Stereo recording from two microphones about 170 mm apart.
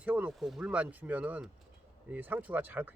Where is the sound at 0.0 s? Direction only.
10° right (ahead or behind).